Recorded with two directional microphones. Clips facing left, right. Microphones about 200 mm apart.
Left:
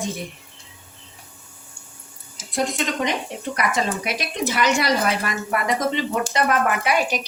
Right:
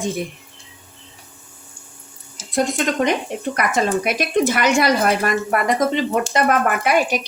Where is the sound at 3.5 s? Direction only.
50° right (ahead or behind).